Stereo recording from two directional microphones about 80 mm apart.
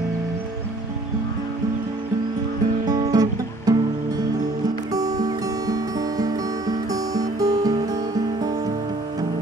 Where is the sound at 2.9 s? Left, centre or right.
Right.